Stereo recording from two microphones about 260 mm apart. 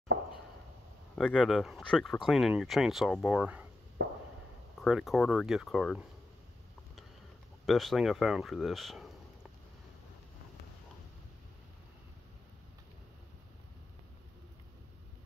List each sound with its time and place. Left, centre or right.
1.1 s speech: centre
4.0 s a sound: right
4.8 s speech: centre
7.6 s speech: centre